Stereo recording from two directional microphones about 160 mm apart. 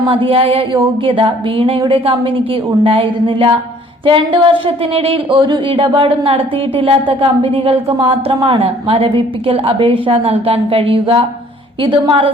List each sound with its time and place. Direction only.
0.1 s speech: 35° right (ahead or behind)